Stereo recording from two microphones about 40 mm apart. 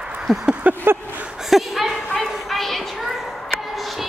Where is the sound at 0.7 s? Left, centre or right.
Right.